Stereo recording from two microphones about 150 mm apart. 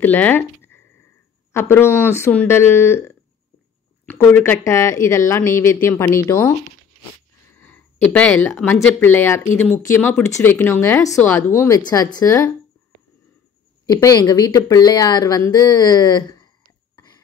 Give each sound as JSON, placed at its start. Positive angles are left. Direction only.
{"t": 0.0, "sound": "a sound", "side_deg": 10}
{"t": 1.5, "sound": "speech", "side_deg": 15}
{"t": 4.3, "sound": "speech", "side_deg": 15}
{"t": 7.5, "sound": "speech", "side_deg": 10}
{"t": 14.0, "sound": "speech", "side_deg": 25}